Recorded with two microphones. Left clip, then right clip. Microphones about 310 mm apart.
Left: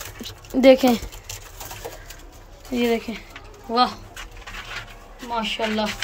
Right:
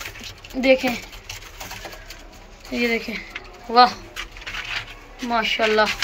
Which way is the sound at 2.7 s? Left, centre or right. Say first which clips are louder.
Even; centre.